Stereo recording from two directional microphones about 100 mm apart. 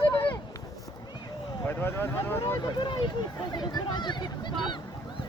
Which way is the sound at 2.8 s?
50° left (ahead or behind).